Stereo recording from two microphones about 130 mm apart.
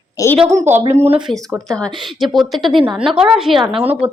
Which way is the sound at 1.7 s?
Centre (ahead or behind).